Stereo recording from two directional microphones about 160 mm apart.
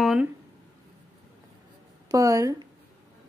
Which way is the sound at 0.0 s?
5° right (ahead or behind).